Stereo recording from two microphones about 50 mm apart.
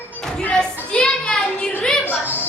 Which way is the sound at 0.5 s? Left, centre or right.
Centre.